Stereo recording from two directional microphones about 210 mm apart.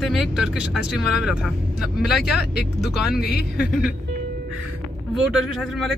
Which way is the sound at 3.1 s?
45° left (ahead or behind).